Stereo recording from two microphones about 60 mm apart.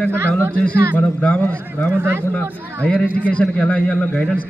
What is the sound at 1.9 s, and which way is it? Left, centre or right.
Speech, right.